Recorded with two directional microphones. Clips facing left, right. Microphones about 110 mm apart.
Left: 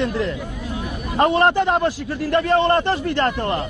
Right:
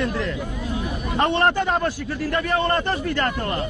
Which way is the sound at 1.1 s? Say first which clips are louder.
Left 4 dB; 35° left (ahead or behind).